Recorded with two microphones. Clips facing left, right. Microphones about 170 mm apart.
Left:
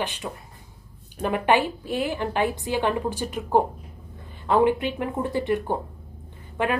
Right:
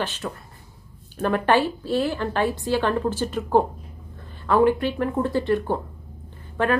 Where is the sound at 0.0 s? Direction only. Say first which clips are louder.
Right 1 dB; 15° left (ahead or behind).